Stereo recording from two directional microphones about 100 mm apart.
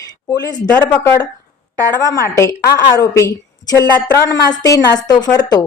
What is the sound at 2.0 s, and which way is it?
A woman's voice, 30° left (ahead or behind).